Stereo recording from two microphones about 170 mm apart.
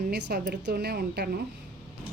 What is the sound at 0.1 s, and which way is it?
A woman's voice, 75° right (ahead or behind).